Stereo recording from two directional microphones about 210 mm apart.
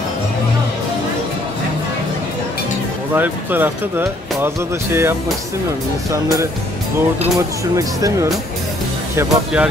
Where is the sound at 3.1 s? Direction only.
10° right (ahead or behind).